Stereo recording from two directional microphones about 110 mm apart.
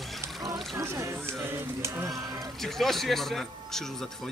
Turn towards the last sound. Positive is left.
turn(degrees=5)  # may be behind; listen again after turning